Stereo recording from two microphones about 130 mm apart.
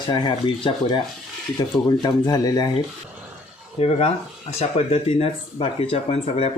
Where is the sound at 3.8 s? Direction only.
50° left (ahead or behind).